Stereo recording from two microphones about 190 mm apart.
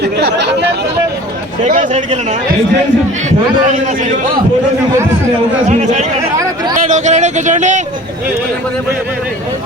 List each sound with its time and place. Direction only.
0.0 s chatter: 65° right (ahead or behind)
1.6 s speech: 40° right (ahead or behind)
5.6 s speech: 40° right (ahead or behind)